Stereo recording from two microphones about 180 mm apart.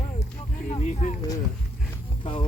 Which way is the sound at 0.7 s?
40° left (ahead or behind).